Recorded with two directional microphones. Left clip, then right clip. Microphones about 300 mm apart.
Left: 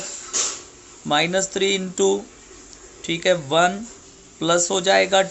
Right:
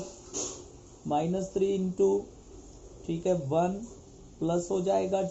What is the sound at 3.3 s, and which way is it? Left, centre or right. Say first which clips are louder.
Speech: left 10 dB; left.